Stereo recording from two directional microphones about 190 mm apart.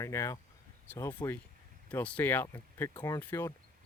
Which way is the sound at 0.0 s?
15° left (ahead or behind).